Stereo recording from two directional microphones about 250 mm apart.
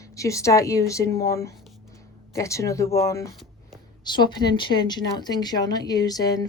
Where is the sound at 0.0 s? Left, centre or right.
Centre.